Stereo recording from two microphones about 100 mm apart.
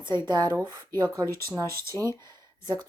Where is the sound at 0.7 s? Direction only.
45° right (ahead or behind).